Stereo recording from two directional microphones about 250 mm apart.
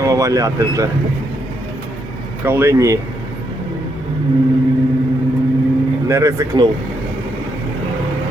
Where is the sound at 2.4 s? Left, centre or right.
Centre.